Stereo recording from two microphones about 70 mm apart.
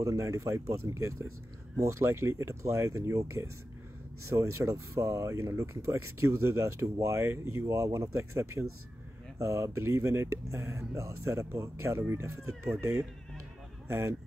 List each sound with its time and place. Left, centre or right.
0.0 s speech: right
13.8 s speech: right